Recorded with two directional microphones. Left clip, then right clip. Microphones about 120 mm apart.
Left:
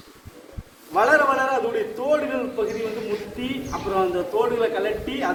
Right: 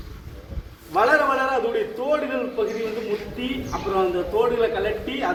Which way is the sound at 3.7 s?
15° left (ahead or behind).